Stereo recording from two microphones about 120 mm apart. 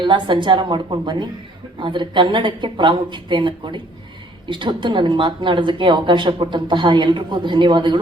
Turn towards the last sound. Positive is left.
turn(degrees=-40)  # may be behind; listen again after turning